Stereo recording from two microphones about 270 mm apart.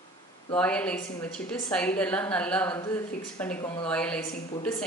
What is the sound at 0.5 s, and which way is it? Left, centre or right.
A woman's voice, centre.